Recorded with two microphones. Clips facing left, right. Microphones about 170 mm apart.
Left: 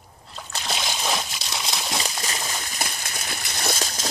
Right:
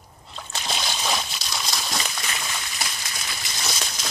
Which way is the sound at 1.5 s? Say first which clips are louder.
Left 1 dB; 20° left (ahead or behind).